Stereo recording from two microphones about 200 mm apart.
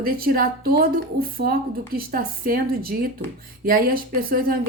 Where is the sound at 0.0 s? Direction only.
45° right (ahead or behind).